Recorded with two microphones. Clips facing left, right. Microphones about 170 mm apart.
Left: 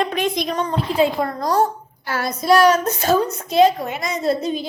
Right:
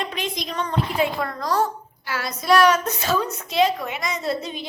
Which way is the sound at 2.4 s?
35° left (ahead or behind).